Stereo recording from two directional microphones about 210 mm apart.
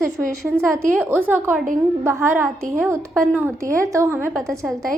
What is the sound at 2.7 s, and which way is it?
A woman's voice, 10° right (ahead or behind).